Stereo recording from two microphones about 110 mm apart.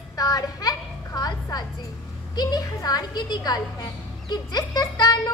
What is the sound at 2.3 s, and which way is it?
A woman's voice, 35° left (ahead or behind).